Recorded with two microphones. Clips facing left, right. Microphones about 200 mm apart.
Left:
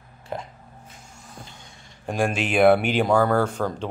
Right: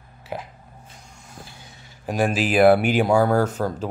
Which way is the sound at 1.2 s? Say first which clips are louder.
Even; 10° right (ahead or behind).